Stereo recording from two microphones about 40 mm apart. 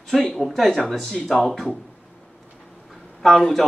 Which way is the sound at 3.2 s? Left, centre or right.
Centre.